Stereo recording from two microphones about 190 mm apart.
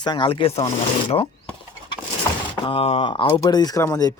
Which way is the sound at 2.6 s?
30° left (ahead or behind).